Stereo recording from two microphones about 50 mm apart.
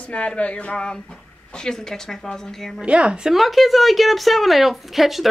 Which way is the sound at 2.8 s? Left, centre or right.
Right.